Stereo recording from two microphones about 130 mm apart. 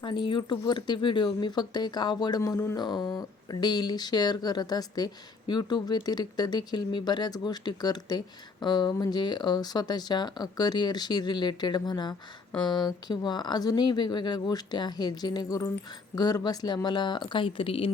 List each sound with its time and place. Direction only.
0.0 s speech: 35° left (ahead or behind)